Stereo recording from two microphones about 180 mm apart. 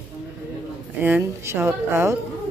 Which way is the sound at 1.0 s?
15° right (ahead or behind).